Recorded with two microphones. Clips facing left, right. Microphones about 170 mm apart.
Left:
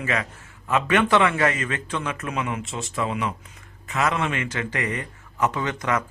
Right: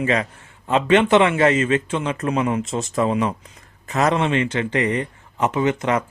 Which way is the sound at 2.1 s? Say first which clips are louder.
Right 7 dB; 35° right (ahead or behind).